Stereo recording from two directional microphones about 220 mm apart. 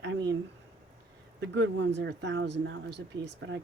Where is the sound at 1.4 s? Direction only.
55° right (ahead or behind).